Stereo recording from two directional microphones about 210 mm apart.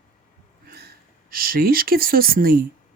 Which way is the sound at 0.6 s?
45° right (ahead or behind).